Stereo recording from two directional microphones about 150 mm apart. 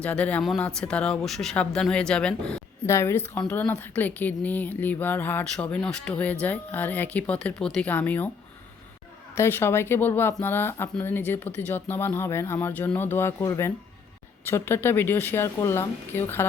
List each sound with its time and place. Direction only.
0.0 s a woman's voice: 10° left (ahead or behind)
2.8 s a woman's voice: 20° left (ahead or behind)
9.3 s a woman's voice: 15° left (ahead or behind)